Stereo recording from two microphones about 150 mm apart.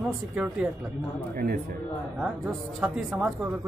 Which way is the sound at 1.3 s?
90° right.